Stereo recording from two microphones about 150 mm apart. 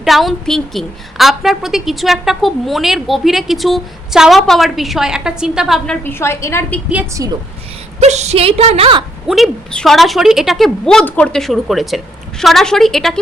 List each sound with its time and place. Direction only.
0.0 s a woman's voice: centre (ahead or behind)
6.1 s a woman's voice: 15° left (ahead or behind)
7.2 s a woman's voice: 20° right (ahead or behind)
7.9 s a woman's voice: 50° right (ahead or behind)
9.2 s a woman's voice: centre (ahead or behind)